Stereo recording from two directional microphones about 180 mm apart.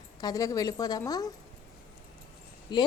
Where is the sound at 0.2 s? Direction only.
20° left (ahead or behind).